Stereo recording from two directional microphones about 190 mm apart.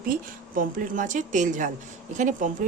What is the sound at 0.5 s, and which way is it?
A woman's voice, 45° right (ahead or behind).